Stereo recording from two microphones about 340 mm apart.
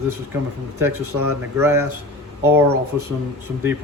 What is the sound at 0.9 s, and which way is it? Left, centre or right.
Speech, right.